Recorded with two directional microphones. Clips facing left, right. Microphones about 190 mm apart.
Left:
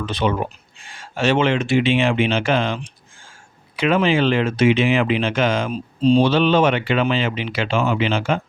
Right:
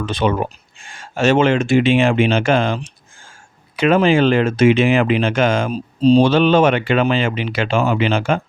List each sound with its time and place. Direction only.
0.0 s speech: 50° right (ahead or behind)